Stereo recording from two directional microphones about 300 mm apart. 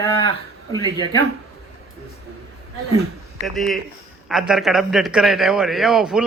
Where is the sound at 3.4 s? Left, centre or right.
Centre.